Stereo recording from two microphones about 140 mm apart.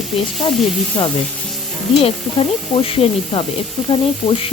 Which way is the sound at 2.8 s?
45° left (ahead or behind).